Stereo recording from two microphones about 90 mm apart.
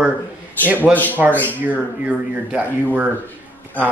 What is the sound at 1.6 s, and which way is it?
A man's voice, 15° right (ahead or behind).